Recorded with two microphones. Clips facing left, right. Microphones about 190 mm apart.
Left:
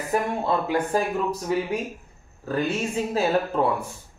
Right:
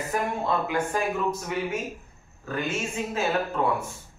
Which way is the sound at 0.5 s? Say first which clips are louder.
Left 4 dB; 35° left (ahead or behind).